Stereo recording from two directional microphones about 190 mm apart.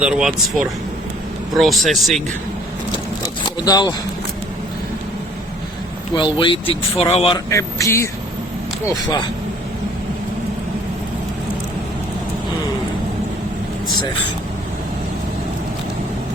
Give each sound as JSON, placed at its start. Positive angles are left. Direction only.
{"t": 0.0, "sound": "speech", "side_deg": -5}
{"t": 3.6, "sound": "speech", "side_deg": 20}
{"t": 6.1, "sound": "speech", "side_deg": 25}
{"t": 7.3, "sound": "speech", "side_deg": 15}